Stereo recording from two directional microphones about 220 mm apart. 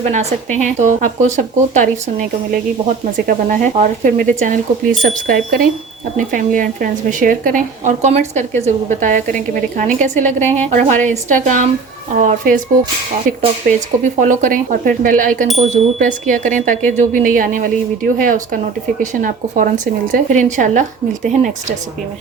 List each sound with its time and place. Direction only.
0.0 s speech: 30° right (ahead or behind)
13.7 s speech: 35° right (ahead or behind)